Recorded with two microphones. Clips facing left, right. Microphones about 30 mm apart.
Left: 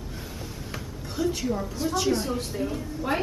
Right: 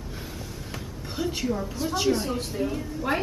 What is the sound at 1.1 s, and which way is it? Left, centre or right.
Speech, centre.